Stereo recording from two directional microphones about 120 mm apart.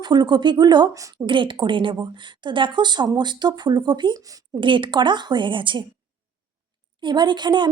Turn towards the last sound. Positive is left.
turn(degrees=-40)  # may be behind; listen again after turning